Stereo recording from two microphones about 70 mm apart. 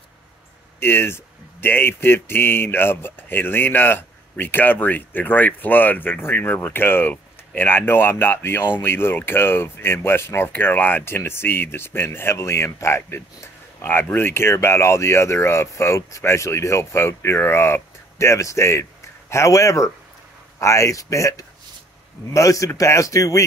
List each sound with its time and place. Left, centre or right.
0.7 s speech: left